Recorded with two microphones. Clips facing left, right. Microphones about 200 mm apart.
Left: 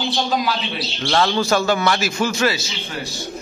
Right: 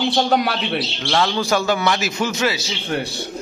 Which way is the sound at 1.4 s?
15° right (ahead or behind).